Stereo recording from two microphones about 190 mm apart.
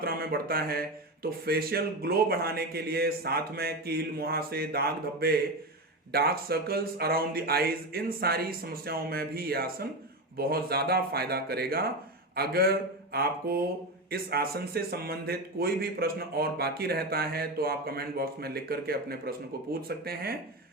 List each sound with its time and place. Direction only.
0.0 s speech: 50° right (ahead or behind)